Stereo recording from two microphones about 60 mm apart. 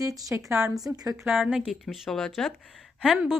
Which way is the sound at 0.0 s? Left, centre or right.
Right.